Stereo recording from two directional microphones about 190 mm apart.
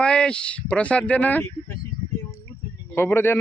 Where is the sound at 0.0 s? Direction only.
5° left (ahead or behind).